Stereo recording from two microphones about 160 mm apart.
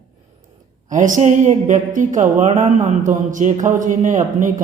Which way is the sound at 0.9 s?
50° right (ahead or behind).